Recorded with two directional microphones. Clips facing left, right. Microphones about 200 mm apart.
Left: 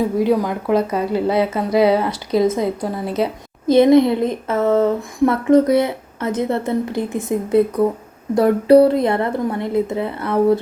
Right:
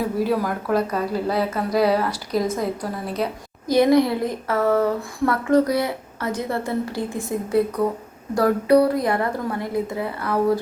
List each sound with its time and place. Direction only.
0.2 s speech: 20° left (ahead or behind)